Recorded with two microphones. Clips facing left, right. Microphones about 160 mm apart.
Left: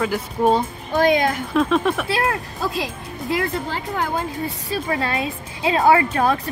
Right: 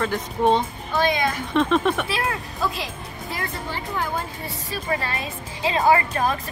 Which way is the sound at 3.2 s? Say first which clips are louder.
Left 8 dB; 75° left (ahead or behind).